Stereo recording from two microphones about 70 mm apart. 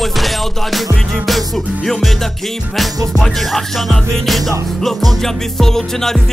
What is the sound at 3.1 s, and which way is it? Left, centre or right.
Music, centre.